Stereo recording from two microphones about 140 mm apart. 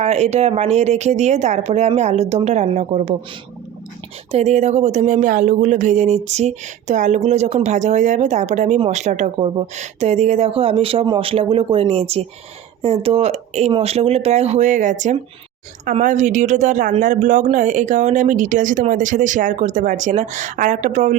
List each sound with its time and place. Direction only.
0.0 s a woman's voice: 50° right (ahead or behind)
4.3 s a woman's voice: 50° right (ahead or behind)